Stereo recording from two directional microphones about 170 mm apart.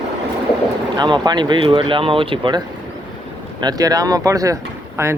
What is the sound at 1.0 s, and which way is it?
Speech, 25° right (ahead or behind).